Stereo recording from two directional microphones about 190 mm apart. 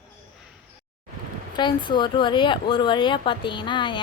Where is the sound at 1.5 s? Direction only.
25° left (ahead or behind).